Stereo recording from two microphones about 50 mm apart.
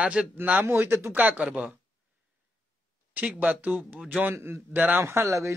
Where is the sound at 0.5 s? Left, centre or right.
Right.